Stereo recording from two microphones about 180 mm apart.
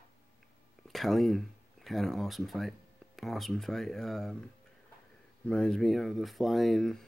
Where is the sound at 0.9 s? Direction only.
Centre (ahead or behind).